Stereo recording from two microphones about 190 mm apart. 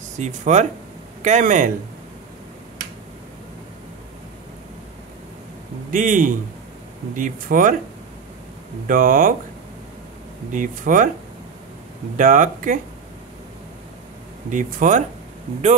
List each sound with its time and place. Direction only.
0.2 s speech: 40° right (ahead or behind)
5.9 s speech: 45° right (ahead or behind)
8.8 s speech: 45° right (ahead or behind)
10.5 s speech: 45° right (ahead or behind)
12.2 s speech: 45° right (ahead or behind)
14.5 s speech: 45° right (ahead or behind)